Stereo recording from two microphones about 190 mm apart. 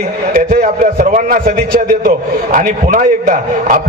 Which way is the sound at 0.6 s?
45° right (ahead or behind).